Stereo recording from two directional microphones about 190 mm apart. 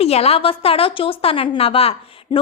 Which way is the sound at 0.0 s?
30° left (ahead or behind).